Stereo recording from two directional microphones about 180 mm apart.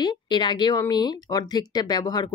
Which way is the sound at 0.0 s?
25° left (ahead or behind).